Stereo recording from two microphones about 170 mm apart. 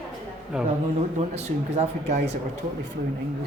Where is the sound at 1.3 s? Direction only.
40° right (ahead or behind).